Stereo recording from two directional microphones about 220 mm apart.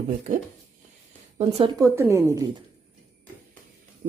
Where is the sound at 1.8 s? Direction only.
10° right (ahead or behind).